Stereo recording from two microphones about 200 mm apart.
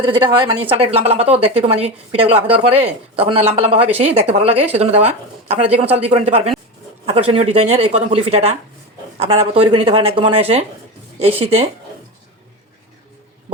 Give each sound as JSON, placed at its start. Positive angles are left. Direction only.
{"t": 0.0, "sound": "speech", "side_deg": -25}